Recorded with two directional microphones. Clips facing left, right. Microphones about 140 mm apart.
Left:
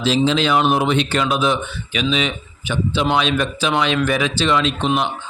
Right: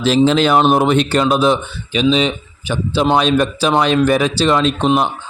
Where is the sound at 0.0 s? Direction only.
50° right (ahead or behind).